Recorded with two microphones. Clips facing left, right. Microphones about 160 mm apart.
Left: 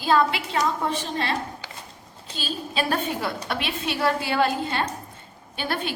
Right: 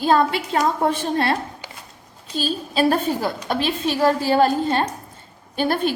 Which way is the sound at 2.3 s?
40° right (ahead or behind).